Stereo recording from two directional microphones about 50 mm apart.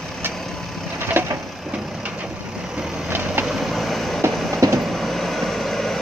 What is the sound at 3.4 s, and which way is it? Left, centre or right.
Vehicle, centre.